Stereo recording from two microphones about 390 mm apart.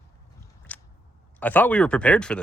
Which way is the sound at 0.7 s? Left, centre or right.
Centre.